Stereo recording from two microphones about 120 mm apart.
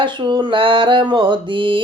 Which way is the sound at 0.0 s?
40° right (ahead or behind).